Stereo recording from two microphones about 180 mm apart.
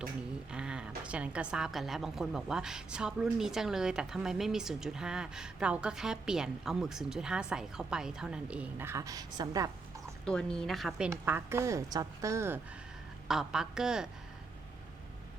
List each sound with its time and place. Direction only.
0.5 s a woman's voice: 5° right (ahead or behind); by 9.6 s 20° right (ahead or behind)
10.2 s a woman's voice: 5° left (ahead or behind)
11.1 s a woman's voice: 10° right (ahead or behind)
13.2 s a woman's voice: 5° right (ahead or behind)